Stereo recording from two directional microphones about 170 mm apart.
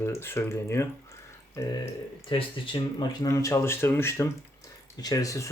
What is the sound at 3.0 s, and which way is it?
Speech, 20° left (ahead or behind).